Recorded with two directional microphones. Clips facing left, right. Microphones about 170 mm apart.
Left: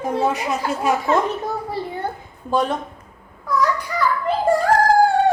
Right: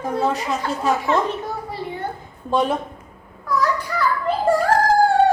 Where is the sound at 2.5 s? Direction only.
Centre (ahead or behind).